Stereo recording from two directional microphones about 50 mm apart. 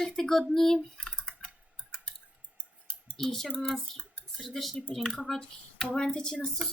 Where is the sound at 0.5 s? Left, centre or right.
Centre.